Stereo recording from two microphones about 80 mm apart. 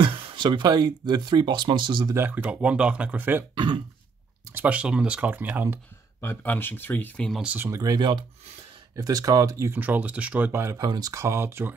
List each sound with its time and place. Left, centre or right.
0.0 s speech: right
2.1 s speech: right
3.5 s speech: right
4.6 s speech: centre
6.2 s speech: left
7.7 s speech: right
9.7 s speech: right
10.5 s speech: right
10.8 s speech: right
11.1 s speech: right